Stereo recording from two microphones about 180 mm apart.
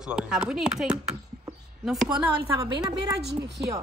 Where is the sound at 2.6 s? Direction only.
20° right (ahead or behind).